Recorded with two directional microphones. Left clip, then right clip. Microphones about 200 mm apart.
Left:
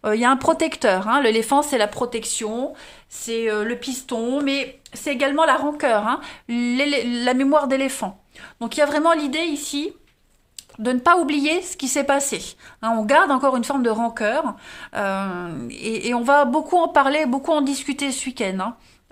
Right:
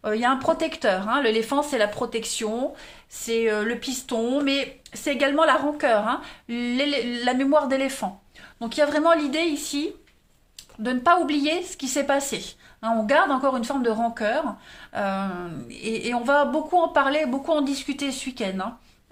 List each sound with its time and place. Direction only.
0.0 s a woman's voice: 40° left (ahead or behind); by 9.9 s 20° left (ahead or behind)
10.8 s a woman's voice: 40° left (ahead or behind)